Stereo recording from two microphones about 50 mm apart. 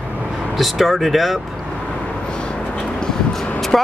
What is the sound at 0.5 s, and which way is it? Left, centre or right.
Speech, centre.